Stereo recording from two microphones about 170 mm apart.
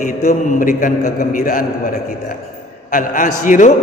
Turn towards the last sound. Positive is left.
turn(degrees=50)  # may be behind; listen again after turning